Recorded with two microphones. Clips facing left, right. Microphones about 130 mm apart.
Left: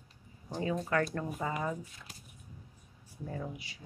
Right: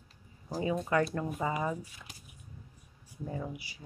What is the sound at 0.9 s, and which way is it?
A man's voice, 15° right (ahead or behind).